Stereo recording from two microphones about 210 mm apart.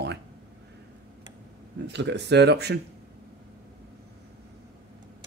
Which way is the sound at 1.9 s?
55° right (ahead or behind).